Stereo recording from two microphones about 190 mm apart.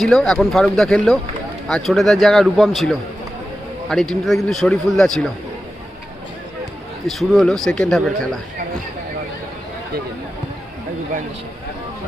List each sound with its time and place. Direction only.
0.0 s a man's voice: centre (ahead or behind)
7.2 s a man's voice: centre (ahead or behind)